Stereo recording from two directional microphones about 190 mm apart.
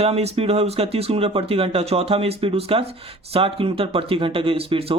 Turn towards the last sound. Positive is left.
turn(degrees=-30)  # may be behind; listen again after turning